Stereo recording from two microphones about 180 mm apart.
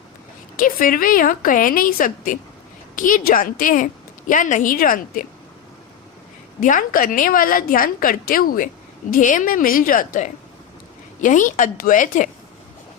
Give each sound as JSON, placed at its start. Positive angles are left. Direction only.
{"t": 0.5, "sound": "a woman's voice", "side_deg": 50}
{"t": 6.6, "sound": "a woman's voice", "side_deg": 45}